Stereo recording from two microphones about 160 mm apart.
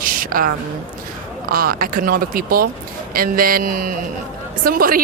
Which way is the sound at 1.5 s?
65° right (ahead or behind).